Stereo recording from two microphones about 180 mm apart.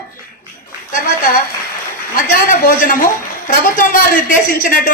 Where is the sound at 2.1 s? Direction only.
50° left (ahead or behind).